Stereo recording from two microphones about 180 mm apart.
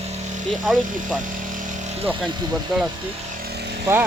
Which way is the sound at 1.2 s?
45° right (ahead or behind).